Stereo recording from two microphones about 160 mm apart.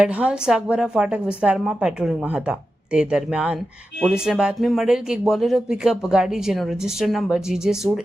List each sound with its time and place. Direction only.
0.0 s speech: 5° right (ahead or behind)